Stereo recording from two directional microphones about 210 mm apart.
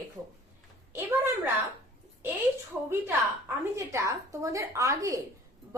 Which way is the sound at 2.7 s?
5° right (ahead or behind).